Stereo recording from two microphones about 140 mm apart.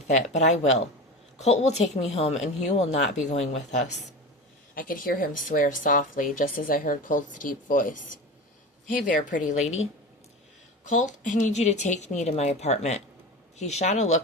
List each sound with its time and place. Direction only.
0.1 s speech: 55° left (ahead or behind)
4.7 s a woman's voice: 90° left; by 9.8 s 55° left (ahead or behind)
10.8 s speech: 65° left (ahead or behind)